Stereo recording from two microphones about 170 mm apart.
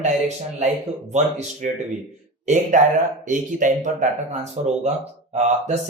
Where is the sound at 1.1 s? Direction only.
40° right (ahead or behind).